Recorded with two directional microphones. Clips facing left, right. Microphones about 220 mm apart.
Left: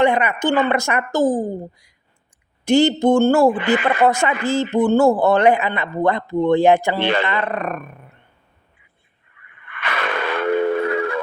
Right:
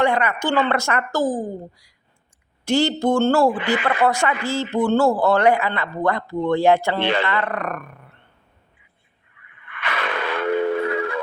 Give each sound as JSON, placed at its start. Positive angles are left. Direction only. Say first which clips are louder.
{"t": 0.0, "sound": "a man's voice", "louder": "left 3 dB", "side_deg": 20}
{"t": 3.6, "sound": "speech", "louder": "left 4 dB", "side_deg": 50}
{"t": 4.0, "sound": "a man's voice", "louder": "left 3 dB", "side_deg": 20}
{"t": 9.5, "sound": "a sound", "louder": "left 1 dB", "side_deg": 50}